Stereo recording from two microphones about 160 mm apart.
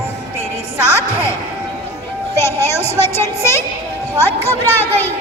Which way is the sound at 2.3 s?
15° left (ahead or behind).